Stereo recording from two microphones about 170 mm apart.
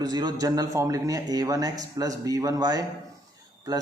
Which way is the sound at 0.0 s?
25° right (ahead or behind).